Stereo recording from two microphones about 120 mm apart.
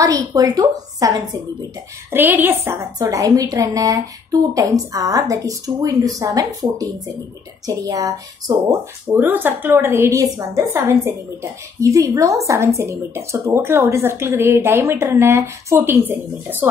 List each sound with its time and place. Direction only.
0.0 s speech: 30° right (ahead or behind)
2.0 s speech: 15° right (ahead or behind)
9.0 s speech: 15° right (ahead or behind)